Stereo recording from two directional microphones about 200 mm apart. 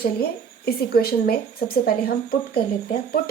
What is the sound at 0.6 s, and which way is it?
Speech, 50° left (ahead or behind).